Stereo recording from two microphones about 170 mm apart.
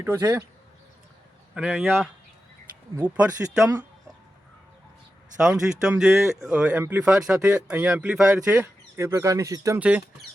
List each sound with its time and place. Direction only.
0.0 s speech: 20° right (ahead or behind)
1.5 s speech: 5° right (ahead or behind)
5.5 s speech: 5° right (ahead or behind)
9.8 s speech: 5° right (ahead or behind)